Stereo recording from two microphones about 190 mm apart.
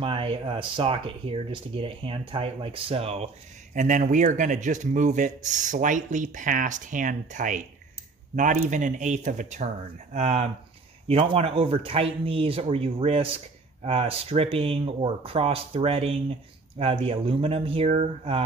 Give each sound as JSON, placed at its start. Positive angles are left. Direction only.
{"t": 0.0, "sound": "speech", "side_deg": -30}